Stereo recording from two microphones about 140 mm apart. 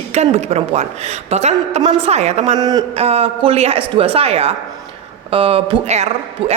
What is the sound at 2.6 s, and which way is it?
Speech, 25° right (ahead or behind).